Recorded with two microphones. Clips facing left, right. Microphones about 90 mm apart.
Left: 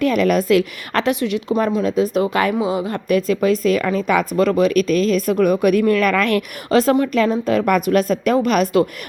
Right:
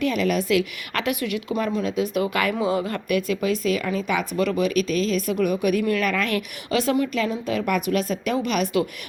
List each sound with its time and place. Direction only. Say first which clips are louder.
0.0 s speech: left 6 dB; 50° left (ahead or behind); by 3.0 s 20° left (ahead or behind)
3.1 s speech: left 7 dB; 35° left (ahead or behind)